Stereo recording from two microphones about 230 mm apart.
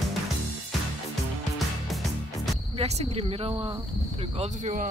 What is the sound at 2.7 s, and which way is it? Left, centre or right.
A woman's voice, right.